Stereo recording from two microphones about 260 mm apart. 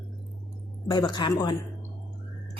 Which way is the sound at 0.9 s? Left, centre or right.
Centre.